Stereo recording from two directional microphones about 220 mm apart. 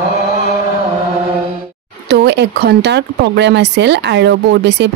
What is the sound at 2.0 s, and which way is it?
Speech, 50° right (ahead or behind).